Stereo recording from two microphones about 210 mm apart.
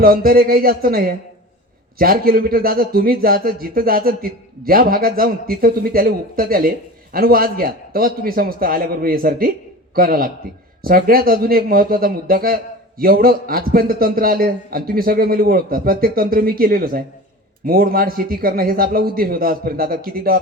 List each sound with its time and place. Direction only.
0.0 s a man's voice: 45° right (ahead or behind)